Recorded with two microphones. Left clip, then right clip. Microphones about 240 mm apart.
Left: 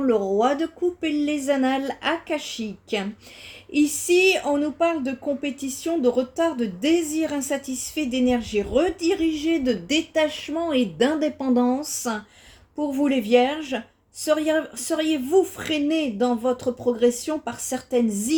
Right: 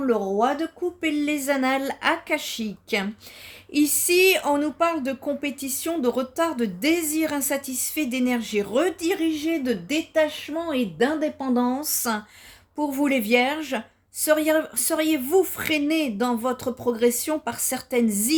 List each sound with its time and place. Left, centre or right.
0.0 s a woman's voice: right